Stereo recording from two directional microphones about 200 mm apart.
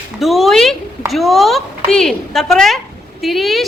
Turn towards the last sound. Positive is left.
turn(degrees=0)  # may be behind; listen again after turning